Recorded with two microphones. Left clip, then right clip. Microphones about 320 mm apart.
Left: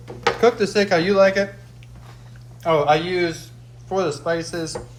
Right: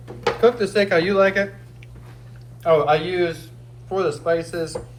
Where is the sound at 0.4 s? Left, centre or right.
Left.